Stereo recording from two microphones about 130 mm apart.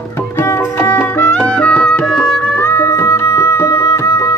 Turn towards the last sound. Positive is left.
turn(degrees=25)  # may be behind; listen again after turning